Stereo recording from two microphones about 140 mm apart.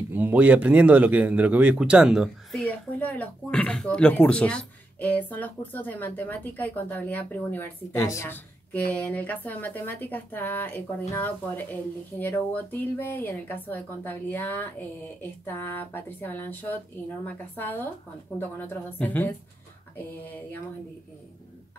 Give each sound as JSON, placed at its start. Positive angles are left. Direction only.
{"t": 0.1, "sound": "speech", "side_deg": -10}
{"t": 2.6, "sound": "speech", "side_deg": 10}